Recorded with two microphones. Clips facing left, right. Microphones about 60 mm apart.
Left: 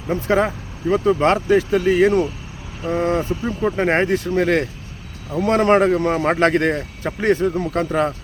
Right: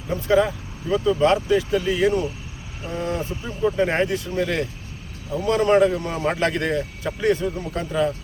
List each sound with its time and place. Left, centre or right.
0.1 s speech: left
3.6 s speech: left